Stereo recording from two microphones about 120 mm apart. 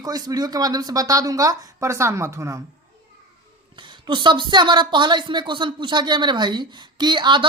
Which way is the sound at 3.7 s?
40° right (ahead or behind).